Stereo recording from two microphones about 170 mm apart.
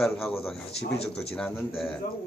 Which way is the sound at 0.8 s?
35° left (ahead or behind).